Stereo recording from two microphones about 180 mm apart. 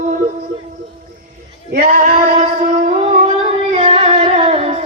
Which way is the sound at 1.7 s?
50° right (ahead or behind).